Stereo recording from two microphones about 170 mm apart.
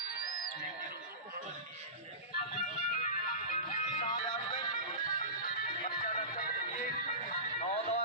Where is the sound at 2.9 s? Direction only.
50° left (ahead or behind).